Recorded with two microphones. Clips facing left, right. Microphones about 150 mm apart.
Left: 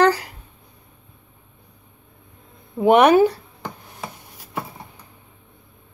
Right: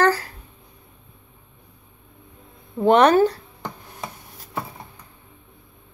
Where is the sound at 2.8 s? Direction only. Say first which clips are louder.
Left 2 dB; 10° left (ahead or behind).